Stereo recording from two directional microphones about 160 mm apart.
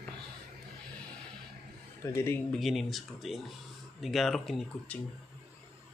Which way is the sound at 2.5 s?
Centre (ahead or behind).